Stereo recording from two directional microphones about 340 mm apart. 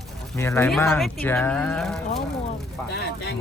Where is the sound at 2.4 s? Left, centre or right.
Left.